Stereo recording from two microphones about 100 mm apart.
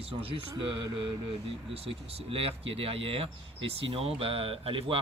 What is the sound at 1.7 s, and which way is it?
Speech, 70° right (ahead or behind).